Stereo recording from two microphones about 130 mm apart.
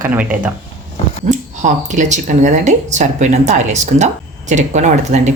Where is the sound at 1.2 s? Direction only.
70° right (ahead or behind).